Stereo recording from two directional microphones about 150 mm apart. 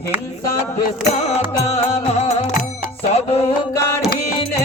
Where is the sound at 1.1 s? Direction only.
45° left (ahead or behind).